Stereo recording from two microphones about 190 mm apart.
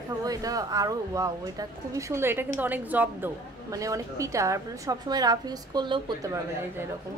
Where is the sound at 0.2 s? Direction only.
20° right (ahead or behind).